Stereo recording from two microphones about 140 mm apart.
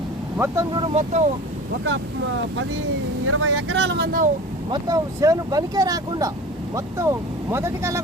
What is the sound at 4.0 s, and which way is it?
Speech, 90° right.